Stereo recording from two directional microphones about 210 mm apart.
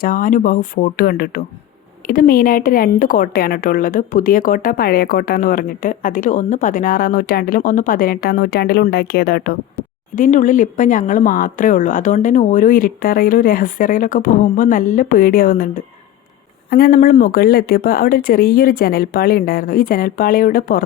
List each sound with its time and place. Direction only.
0.0 s a woman's voice: 40° left (ahead or behind)